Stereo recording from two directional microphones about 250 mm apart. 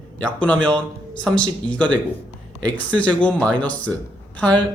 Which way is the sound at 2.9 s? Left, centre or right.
Centre.